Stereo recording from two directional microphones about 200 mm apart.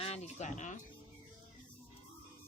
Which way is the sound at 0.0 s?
30° left (ahead or behind).